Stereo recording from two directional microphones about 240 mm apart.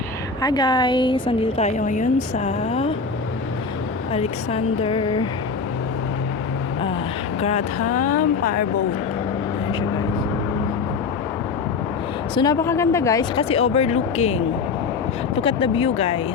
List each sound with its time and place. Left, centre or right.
0.4 s a woman's voice: centre
4.1 s a woman's voice: left
7.4 s speech: left
12.3 s a woman's voice: centre